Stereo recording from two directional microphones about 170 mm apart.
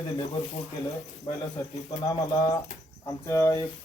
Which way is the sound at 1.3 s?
35° left (ahead or behind).